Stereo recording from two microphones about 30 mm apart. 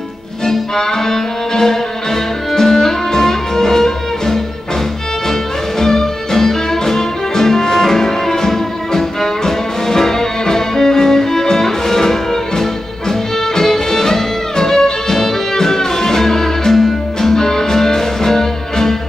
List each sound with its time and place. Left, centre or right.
0.5 s music: centre
5.8 s music: centre